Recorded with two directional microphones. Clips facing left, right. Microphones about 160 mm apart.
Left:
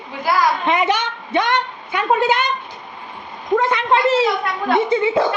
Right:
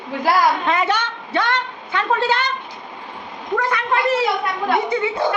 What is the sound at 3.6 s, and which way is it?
A woman's voice, 25° left (ahead or behind).